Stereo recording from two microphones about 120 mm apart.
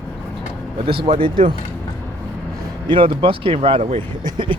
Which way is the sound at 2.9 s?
50° right (ahead or behind).